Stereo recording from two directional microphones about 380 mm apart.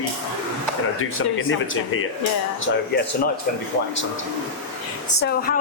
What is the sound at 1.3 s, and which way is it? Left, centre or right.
Speech, left.